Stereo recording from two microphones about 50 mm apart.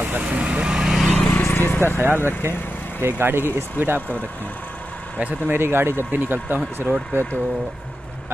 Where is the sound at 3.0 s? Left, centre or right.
Right.